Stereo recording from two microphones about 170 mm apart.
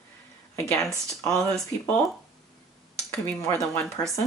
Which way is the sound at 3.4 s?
15° left (ahead or behind).